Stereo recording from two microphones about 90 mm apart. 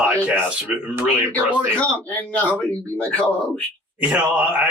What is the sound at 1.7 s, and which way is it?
Speech, 15° left (ahead or behind).